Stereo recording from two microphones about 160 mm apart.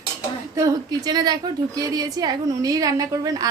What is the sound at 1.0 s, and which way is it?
A woman's voice, 25° right (ahead or behind).